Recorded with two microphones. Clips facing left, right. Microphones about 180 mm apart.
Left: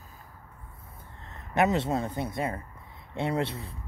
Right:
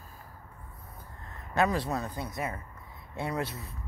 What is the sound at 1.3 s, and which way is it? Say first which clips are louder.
Speech: left 3 dB; 20° left (ahead or behind).